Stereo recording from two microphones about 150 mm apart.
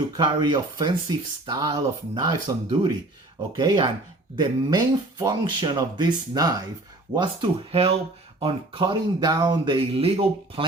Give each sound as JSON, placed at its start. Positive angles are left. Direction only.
{"t": 0.4, "sound": "speech", "side_deg": -30}
{"t": 7.2, "sound": "speech", "side_deg": -35}